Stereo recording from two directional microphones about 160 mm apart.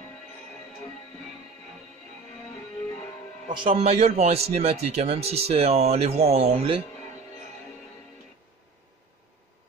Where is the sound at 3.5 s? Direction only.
35° right (ahead or behind).